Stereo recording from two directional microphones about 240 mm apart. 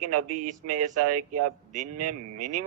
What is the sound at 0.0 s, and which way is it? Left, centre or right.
Speech, right.